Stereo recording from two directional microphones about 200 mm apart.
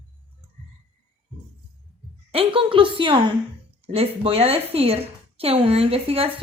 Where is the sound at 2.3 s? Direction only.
25° right (ahead or behind).